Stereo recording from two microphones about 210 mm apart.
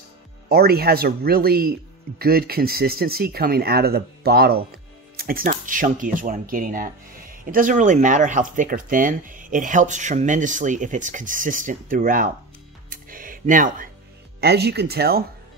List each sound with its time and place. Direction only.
0.5 s a man's voice: 50° right (ahead or behind)
12.9 s a sound: 40° right (ahead or behind)
14.4 s a man's voice: 50° right (ahead or behind)